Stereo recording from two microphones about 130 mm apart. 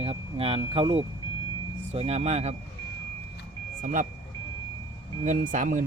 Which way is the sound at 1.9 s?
55° right (ahead or behind).